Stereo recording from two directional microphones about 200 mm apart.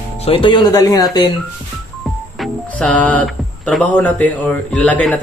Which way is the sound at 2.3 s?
5° left (ahead or behind).